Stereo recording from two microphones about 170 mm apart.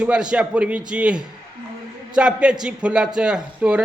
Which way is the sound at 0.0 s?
5° right (ahead or behind).